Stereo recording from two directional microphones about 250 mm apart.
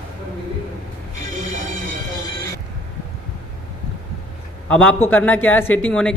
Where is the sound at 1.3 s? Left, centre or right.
Right.